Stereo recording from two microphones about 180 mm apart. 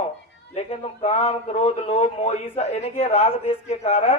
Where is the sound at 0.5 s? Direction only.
35° left (ahead or behind).